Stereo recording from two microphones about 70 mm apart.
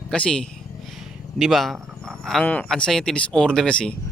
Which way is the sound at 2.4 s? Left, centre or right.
Left.